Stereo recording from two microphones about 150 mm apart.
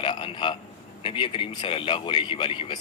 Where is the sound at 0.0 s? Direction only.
30° left (ahead or behind).